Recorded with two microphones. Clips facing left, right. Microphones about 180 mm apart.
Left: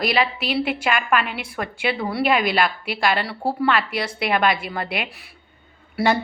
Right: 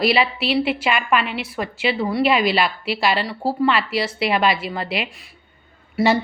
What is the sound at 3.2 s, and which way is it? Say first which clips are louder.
Speech: right 3 dB; centre (ahead or behind).